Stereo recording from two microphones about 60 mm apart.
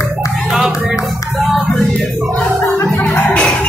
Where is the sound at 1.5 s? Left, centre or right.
Centre.